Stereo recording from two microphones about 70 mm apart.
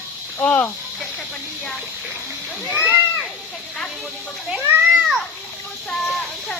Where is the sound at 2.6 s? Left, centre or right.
Right.